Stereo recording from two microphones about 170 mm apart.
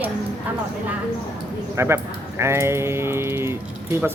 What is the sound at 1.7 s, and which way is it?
Speech, 15° right (ahead or behind).